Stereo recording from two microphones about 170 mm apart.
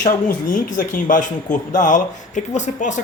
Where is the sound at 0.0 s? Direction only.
55° left (ahead or behind).